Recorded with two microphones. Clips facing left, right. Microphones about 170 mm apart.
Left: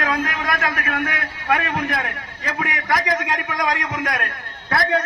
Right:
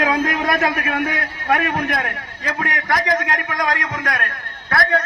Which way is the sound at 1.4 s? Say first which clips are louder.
Right 2 dB; 5° right (ahead or behind).